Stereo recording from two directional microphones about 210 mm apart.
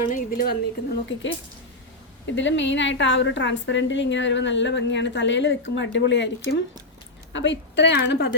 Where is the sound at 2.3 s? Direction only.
60° left (ahead or behind).